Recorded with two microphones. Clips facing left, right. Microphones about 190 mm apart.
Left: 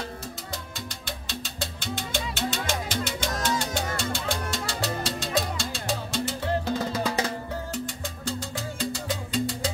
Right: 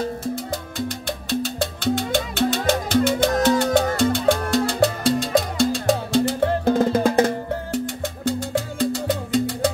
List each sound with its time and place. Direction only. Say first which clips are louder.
1.8 s music: right 10 dB; 60° right (ahead or behind)
8.7 s music: right 7 dB; 60° right (ahead or behind)